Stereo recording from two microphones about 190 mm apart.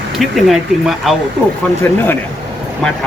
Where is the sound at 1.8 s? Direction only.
10° left (ahead or behind).